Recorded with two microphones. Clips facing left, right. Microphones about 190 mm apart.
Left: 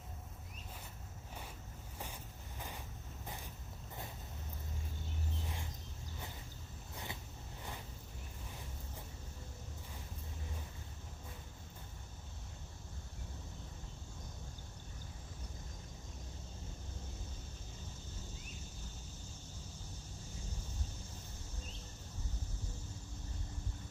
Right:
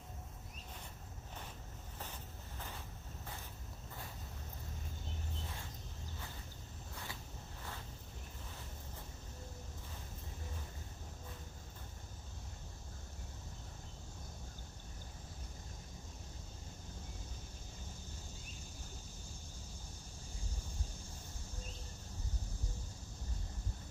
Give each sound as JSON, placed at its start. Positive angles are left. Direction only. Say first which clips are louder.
{"t": 2.6, "sound": "boat", "louder": "left 1 dB", "side_deg": 15}
{"t": 6.9, "sound": "vehicle", "louder": "left 3 dB", "side_deg": 20}